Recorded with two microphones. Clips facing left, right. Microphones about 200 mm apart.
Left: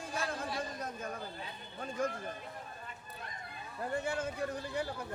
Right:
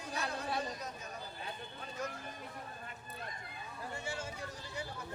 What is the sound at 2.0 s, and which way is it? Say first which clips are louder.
Speech: left 7 dB; 50° left (ahead or behind).